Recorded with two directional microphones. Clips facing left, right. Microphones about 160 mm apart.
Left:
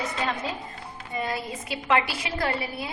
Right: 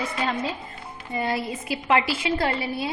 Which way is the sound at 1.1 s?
25° right (ahead or behind).